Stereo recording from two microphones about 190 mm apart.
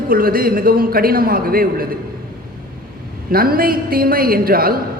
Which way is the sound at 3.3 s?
50° right (ahead or behind).